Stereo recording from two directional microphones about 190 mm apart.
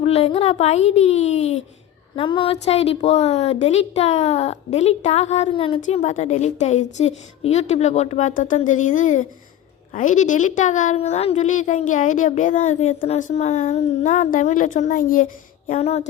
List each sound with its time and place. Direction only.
0.0 s a woman's voice: 30° left (ahead or behind)